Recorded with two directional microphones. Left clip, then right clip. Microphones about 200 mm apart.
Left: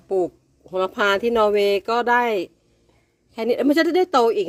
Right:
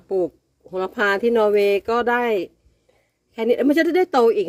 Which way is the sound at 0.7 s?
10° left (ahead or behind).